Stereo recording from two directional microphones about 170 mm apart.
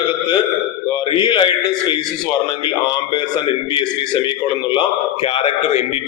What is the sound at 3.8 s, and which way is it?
A man's voice, 30° left (ahead or behind).